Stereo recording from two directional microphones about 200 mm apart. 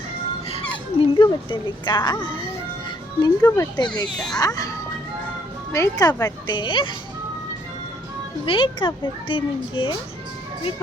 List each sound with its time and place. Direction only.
0.5 s speech: 25° left (ahead or behind)
3.2 s speech: 20° left (ahead or behind)
5.7 s speech: 15° left (ahead or behind)
8.4 s speech: 25° left (ahead or behind)